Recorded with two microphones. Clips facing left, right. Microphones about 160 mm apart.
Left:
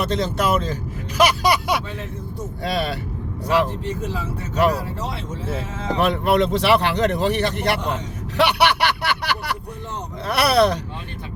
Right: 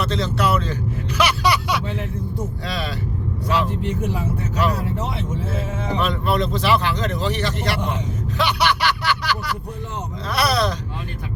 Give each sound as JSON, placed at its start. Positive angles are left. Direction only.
{"t": 0.0, "sound": "speech", "side_deg": 50}
{"t": 5.5, "sound": "speech", "side_deg": 65}